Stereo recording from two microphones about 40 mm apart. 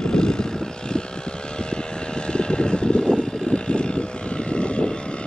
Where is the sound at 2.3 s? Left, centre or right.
Left.